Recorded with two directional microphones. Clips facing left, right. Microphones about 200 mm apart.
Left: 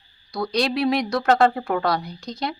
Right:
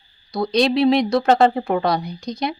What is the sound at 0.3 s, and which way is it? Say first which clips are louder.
A woman's voice: right 5 dB; 25° right (ahead or behind).